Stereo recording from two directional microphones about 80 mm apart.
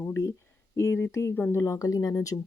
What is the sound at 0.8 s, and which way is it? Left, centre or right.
Speech, left.